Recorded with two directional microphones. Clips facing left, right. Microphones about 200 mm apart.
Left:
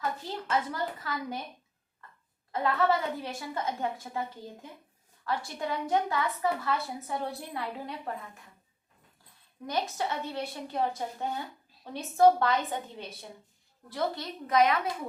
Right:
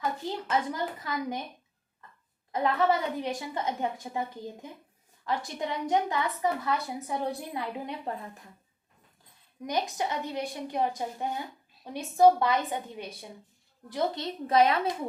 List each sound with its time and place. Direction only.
0.0 s a woman's voice: 15° right (ahead or behind)
2.5 s a woman's voice: 20° right (ahead or behind)
5.2 s a woman's voice: 20° right (ahead or behind)
9.6 s a woman's voice: 15° right (ahead or behind)
13.9 s a woman's voice: 25° right (ahead or behind)